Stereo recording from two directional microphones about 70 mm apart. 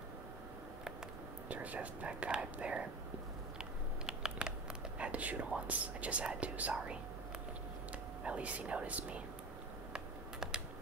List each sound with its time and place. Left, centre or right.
1.5 s speech: right
4.0 s whispering: centre
8.2 s speech: centre
9.9 s computer keyboard: centre